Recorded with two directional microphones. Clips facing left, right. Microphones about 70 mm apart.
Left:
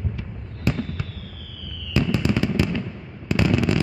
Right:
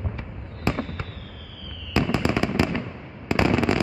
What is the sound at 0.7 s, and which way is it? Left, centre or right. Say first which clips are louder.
Fireworks: left 1 dB; right.